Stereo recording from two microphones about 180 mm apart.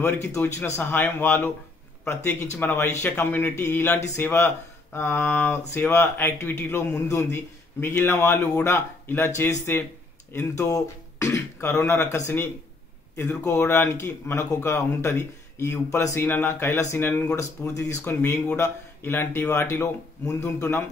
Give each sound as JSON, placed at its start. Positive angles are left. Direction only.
{"t": 0.0, "sound": "speech", "side_deg": 15}
{"t": 2.5, "sound": "speech", "side_deg": 15}
{"t": 10.6, "sound": "beatboxing", "side_deg": 15}
{"t": 11.9, "sound": "speech", "side_deg": 15}